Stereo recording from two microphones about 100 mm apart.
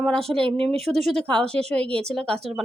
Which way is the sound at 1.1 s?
10° left (ahead or behind).